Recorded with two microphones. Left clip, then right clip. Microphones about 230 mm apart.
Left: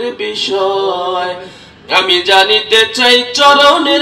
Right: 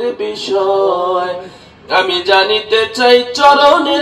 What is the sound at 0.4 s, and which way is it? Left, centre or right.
Music, centre.